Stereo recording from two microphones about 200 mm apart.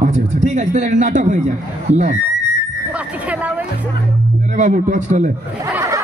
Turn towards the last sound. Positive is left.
turn(degrees=-15)  # may be behind; listen again after turning